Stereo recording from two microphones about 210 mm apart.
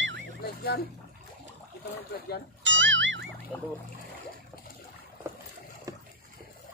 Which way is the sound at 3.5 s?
10° left (ahead or behind).